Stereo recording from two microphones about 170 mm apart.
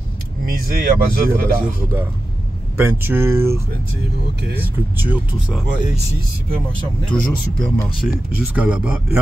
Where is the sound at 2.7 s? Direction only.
10° right (ahead or behind).